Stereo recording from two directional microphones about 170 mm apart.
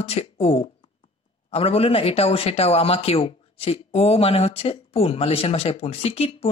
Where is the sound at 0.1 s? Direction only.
35° left (ahead or behind).